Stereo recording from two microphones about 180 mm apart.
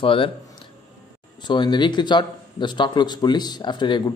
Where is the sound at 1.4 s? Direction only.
25° left (ahead or behind).